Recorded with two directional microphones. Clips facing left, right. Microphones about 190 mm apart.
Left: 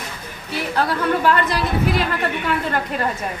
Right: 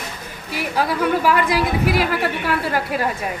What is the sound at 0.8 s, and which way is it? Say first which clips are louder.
A woman's voice: right 1 dB; 10° right (ahead or behind).